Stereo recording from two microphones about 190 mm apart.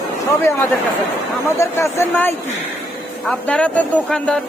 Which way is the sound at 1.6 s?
15° left (ahead or behind).